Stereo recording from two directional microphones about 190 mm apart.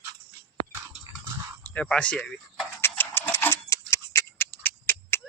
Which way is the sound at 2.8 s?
10° left (ahead or behind).